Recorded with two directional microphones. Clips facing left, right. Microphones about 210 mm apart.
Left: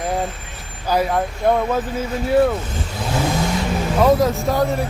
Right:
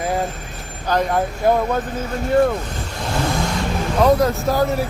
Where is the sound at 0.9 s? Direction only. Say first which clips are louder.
Even; 5° left (ahead or behind).